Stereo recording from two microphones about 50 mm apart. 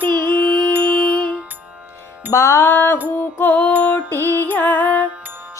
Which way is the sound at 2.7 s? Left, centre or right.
Left.